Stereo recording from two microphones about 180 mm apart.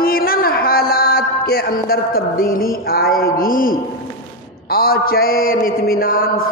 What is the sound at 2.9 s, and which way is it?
Speech, 55° left (ahead or behind).